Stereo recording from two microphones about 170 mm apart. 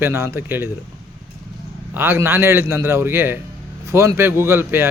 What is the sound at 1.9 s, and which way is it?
Speech, 15° right (ahead or behind).